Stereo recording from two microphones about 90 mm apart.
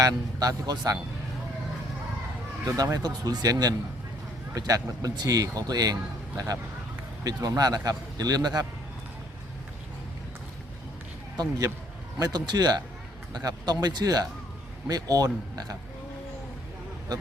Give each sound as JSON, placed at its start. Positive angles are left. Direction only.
{"t": 0.0, "sound": "a man's voice", "side_deg": -45}
{"t": 2.6, "sound": "a man's voice", "side_deg": -40}
{"t": 11.3, "sound": "a man's voice", "side_deg": -45}